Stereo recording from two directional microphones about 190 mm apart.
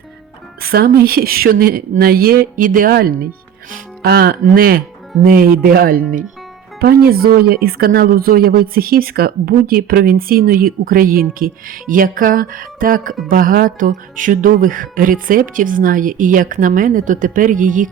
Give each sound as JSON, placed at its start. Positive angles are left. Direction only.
{"t": 0.6, "sound": "speech", "side_deg": -55}